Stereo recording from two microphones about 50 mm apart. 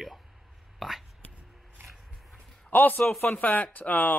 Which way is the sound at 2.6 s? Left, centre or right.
Left.